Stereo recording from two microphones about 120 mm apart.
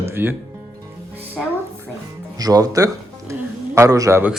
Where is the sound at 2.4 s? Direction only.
30° right (ahead or behind).